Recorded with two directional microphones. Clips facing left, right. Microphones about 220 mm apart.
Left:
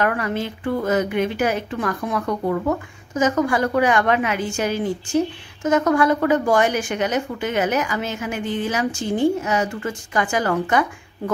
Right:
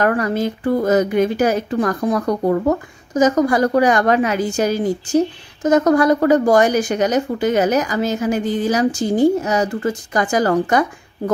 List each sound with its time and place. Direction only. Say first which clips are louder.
0.0 s a woman's voice: right 5 dB; 40° right (ahead or behind)